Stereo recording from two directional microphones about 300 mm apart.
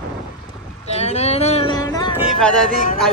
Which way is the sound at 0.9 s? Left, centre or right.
Left.